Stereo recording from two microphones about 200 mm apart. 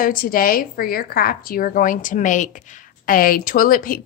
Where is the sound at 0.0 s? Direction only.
45° left (ahead or behind).